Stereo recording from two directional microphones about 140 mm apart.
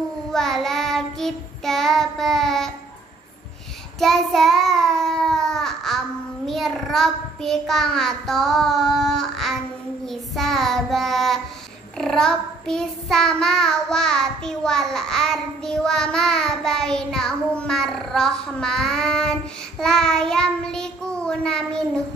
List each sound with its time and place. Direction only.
0.3 s child singing: 5° left (ahead or behind)
4.0 s a child's voice: centre (ahead or behind)
10.0 s child singing: centre (ahead or behind)